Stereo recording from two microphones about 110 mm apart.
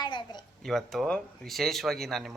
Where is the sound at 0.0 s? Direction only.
45° left (ahead or behind).